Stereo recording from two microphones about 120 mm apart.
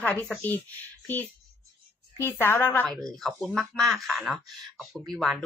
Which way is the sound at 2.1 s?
20° left (ahead or behind).